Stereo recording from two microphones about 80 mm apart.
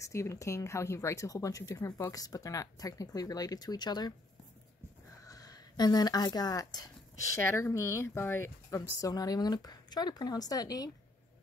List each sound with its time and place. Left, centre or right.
0.0 s speech: left
5.2 s a sound: left
7.3 s speech: left
9.1 s speech: left